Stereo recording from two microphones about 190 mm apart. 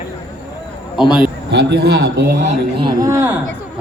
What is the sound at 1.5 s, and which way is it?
Speech, 65° right (ahead or behind).